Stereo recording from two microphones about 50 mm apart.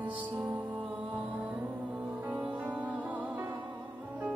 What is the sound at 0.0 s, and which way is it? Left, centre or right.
Music, right.